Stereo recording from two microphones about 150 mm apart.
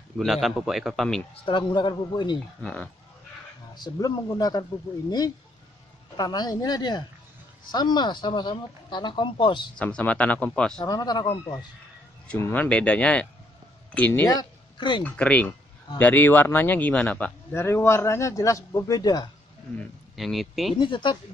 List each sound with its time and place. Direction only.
0.2 s a man's voice: centre (ahead or behind)
1.3 s speech: 35° left (ahead or behind)
2.6 s a man's voice: 5° left (ahead or behind)
3.7 s speech: 30° left (ahead or behind)
6.1 s speech: 25° left (ahead or behind)
9.8 s a man's voice: 10° left (ahead or behind)
10.9 s speech: 25° left (ahead or behind)
12.3 s a man's voice: 15° left (ahead or behind)
14.2 s speech: 30° left (ahead or behind)
15.0 s a man's voice: 10° left (ahead or behind); by 19.3 s 25° left (ahead or behind)
20.2 s a man's voice: centre (ahead or behind)
20.7 s speech: 30° left (ahead or behind)